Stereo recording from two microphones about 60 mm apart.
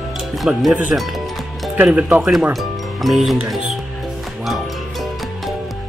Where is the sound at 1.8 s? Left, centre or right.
Right.